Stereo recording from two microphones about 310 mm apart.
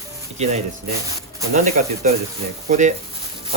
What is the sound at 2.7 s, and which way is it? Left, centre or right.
Speech, right.